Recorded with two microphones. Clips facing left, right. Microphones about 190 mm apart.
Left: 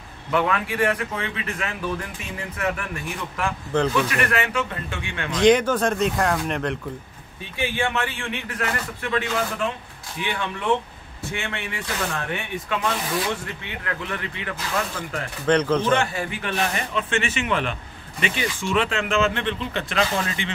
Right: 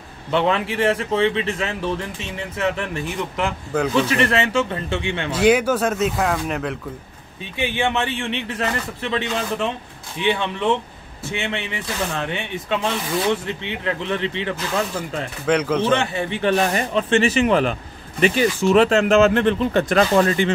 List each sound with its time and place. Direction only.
0.3 s speech: 25° right (ahead or behind)
5.3 s speech: 10° right (ahead or behind)
7.5 s speech: 20° right (ahead or behind)
15.4 s speech: 10° right (ahead or behind)
16.0 s speech: 25° right (ahead or behind); by 20.5 s 45° right (ahead or behind)